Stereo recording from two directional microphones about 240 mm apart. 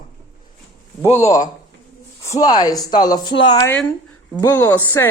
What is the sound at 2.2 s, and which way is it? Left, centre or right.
A woman's voice, centre.